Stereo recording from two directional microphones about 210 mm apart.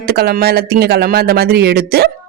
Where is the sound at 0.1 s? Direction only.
50° right (ahead or behind).